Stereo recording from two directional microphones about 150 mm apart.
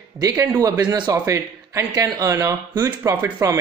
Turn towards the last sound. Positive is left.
turn(degrees=-20)  # may be behind; listen again after turning